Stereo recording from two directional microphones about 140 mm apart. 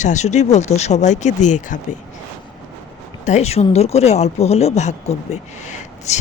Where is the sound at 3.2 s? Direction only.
55° left (ahead or behind).